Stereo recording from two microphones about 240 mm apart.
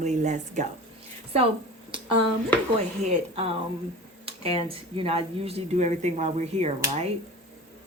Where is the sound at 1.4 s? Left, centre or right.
Right.